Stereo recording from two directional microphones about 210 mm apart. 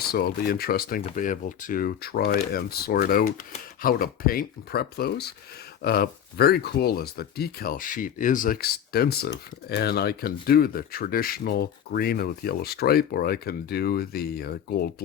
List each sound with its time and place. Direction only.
0.1 s speech: 45° left (ahead or behind)